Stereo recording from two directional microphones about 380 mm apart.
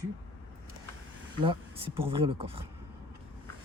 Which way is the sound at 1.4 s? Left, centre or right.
Centre.